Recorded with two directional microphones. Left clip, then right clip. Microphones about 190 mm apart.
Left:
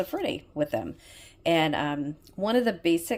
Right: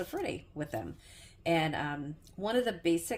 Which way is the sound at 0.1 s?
35° left (ahead or behind).